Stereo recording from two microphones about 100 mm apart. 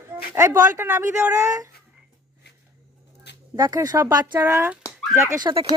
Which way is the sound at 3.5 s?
40° right (ahead or behind).